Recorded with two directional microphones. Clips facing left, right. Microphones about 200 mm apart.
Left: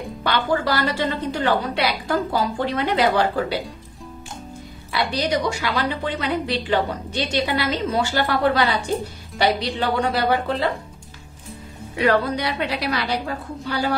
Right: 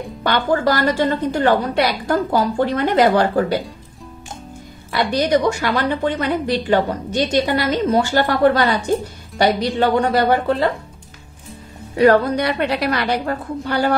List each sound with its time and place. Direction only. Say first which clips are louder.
0.2 s a woman's voice: right 4 dB; 45° right (ahead or behind)
4.9 s a woman's voice: right 5 dB; 50° right (ahead or behind)
11.9 s a woman's voice: right 6 dB; 45° right (ahead or behind)